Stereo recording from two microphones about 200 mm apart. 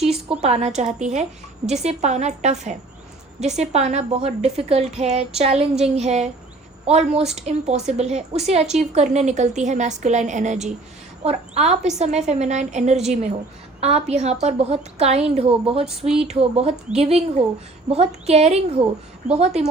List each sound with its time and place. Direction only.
0.4 s a woman's voice: 30° right (ahead or behind)
15.8 s a sound: 5° right (ahead or behind)
16.1 s a woman's voice: 30° right (ahead or behind)